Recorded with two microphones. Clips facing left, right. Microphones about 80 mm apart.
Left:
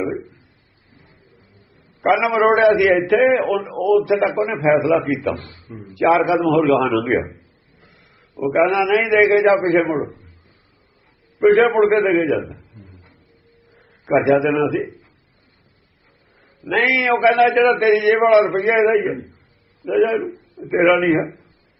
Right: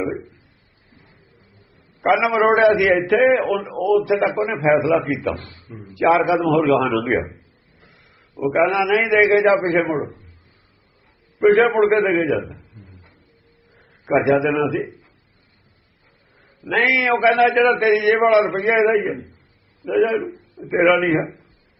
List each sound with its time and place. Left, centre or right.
0.2 s a sound: left
0.9 s bird: left
2.0 s a man's voice: centre
5.3 s a man's voice: left
5.9 s a man's voice: centre
8.4 s a man's voice: centre
10.1 s a sound: left
11.3 s a man's voice: centre
12.5 s a sound: left
14.0 s a man's voice: centre
16.6 s a man's voice: centre
19.1 s a sound: left
19.9 s a man's voice: centre